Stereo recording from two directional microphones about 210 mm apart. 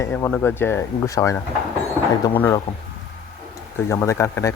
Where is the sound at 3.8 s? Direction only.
15° left (ahead or behind).